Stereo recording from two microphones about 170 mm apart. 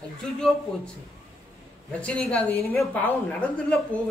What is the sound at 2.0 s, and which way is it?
A woman's voice, 5° left (ahead or behind).